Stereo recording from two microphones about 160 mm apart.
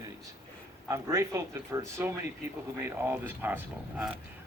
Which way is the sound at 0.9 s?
20° right (ahead or behind).